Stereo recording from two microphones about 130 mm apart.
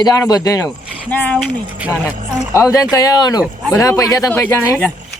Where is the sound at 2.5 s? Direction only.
25° left (ahead or behind).